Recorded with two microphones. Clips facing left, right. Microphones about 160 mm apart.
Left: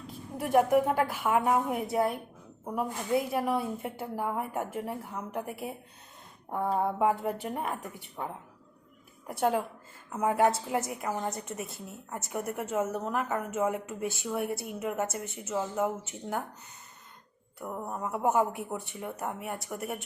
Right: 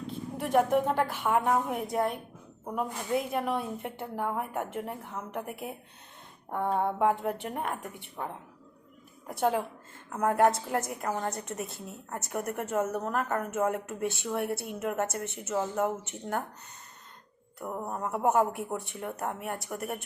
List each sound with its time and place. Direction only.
0.4 s a woman's voice: 5° left (ahead or behind)
9.4 s a woman's voice: 5° left (ahead or behind)
17.9 s a woman's voice: centre (ahead or behind)
19.4 s speech: 60° right (ahead or behind)
19.7 s a woman's voice: centre (ahead or behind)